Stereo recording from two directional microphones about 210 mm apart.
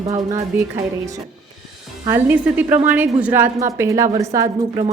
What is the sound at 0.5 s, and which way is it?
Speech, 10° right (ahead or behind).